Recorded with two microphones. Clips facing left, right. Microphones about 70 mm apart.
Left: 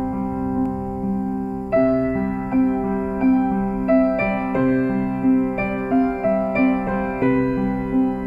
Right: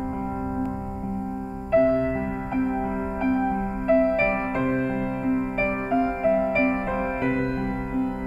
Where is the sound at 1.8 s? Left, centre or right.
Left.